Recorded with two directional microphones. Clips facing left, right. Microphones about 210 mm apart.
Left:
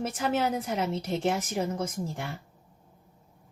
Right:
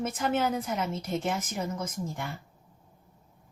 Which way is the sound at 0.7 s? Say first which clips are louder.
Left 2 dB; 30° left (ahead or behind).